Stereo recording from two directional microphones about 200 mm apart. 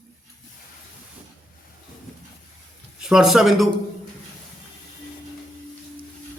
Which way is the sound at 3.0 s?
5° right (ahead or behind).